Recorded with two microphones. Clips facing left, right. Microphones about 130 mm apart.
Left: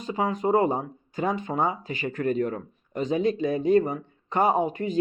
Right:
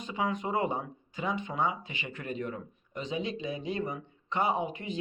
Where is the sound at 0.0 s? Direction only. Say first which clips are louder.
Left 6 dB; 40° left (ahead or behind).